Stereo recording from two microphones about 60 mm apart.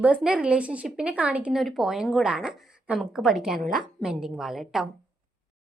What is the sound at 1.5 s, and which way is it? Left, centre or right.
A woman's voice, centre.